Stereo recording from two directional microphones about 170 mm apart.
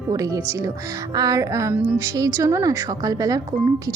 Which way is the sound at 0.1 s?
20° right (ahead or behind).